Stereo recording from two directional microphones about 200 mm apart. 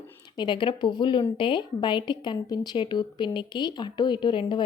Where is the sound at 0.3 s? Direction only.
25° left (ahead or behind).